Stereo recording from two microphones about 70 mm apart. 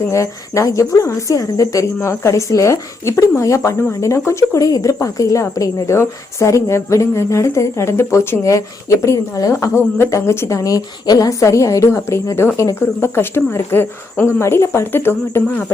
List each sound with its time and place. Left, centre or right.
0.1 s speech: left
8.4 s speech: left
11.3 s speech: left